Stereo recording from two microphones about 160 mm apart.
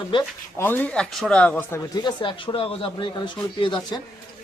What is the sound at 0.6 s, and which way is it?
Speech, 10° left (ahead or behind).